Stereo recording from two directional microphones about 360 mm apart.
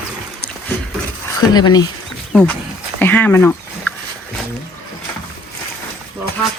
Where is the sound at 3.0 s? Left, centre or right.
Centre.